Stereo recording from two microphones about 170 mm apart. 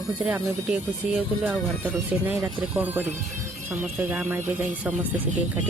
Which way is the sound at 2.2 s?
10° right (ahead or behind).